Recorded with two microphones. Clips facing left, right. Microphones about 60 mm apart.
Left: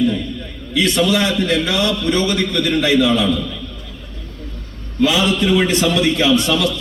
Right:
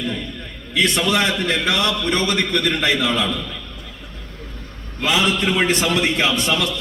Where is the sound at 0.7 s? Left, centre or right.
Right.